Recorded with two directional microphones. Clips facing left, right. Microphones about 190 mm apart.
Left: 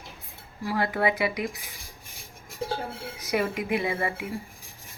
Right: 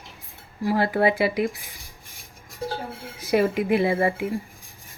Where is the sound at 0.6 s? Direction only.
30° right (ahead or behind).